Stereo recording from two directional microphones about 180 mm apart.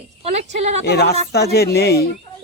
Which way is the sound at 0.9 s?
65° left (ahead or behind).